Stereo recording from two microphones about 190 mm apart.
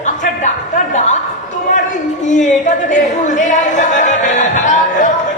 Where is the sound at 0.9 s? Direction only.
40° left (ahead or behind).